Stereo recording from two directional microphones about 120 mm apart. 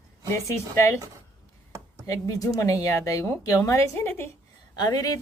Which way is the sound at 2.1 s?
30° left (ahead or behind).